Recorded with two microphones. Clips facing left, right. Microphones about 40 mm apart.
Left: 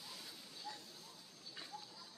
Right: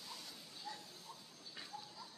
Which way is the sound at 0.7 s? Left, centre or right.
Centre.